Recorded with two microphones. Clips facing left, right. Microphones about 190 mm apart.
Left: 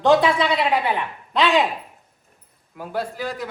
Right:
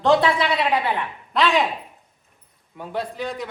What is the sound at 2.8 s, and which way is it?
Speech, centre (ahead or behind).